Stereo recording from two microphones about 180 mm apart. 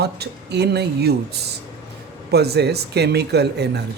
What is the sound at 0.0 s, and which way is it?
Speech, 65° right (ahead or behind).